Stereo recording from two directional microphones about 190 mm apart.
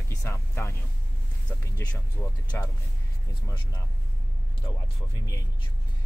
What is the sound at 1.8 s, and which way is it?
Speech, 15° left (ahead or behind).